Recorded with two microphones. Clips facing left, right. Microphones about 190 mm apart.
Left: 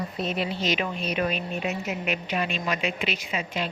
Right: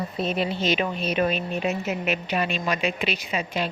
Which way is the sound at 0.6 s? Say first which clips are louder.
Right 3 dB; 30° right (ahead or behind).